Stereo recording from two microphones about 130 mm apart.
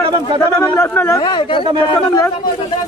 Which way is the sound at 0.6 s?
20° left (ahead or behind).